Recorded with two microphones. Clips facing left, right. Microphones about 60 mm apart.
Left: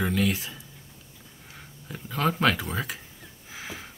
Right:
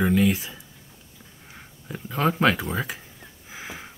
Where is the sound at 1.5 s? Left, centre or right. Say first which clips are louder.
Right 4 dB; centre.